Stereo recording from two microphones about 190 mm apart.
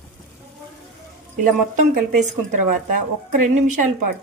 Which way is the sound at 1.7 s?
40° right (ahead or behind).